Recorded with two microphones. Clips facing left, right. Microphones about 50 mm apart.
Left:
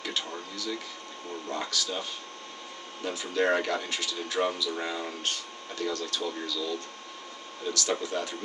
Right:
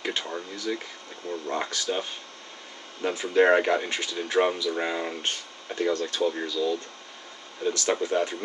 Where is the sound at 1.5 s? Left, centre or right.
Right.